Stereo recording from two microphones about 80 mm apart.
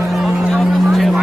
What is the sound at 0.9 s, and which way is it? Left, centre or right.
Vehicle, centre.